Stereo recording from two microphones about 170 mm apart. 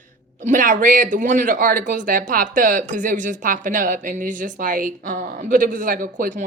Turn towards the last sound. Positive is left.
turn(degrees=-55)  # may be behind; listen again after turning